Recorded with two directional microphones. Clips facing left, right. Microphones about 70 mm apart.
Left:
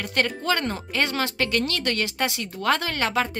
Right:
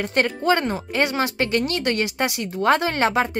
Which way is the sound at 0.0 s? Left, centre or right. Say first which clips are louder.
Right 4 dB; right.